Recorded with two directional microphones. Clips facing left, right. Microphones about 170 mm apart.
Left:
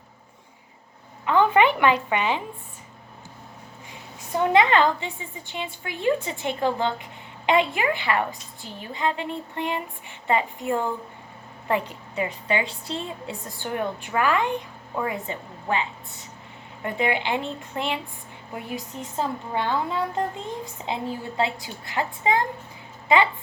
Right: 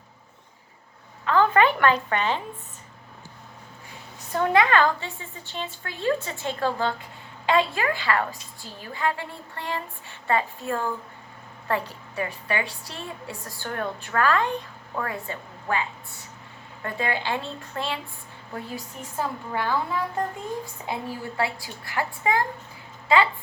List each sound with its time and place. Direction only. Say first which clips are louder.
1.2 s a woman's voice: left 1 dB; 15° left (ahead or behind)
4.4 s a woman's voice: left 1 dB; 20° left (ahead or behind)